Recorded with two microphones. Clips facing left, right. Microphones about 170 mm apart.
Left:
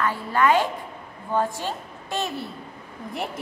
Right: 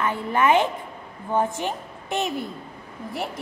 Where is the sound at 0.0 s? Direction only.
20° right (ahead or behind).